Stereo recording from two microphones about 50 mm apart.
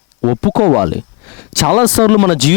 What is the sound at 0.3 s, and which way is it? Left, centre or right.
Speech, centre.